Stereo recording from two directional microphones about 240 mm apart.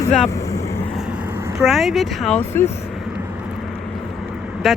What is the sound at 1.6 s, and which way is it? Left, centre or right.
Speech, centre.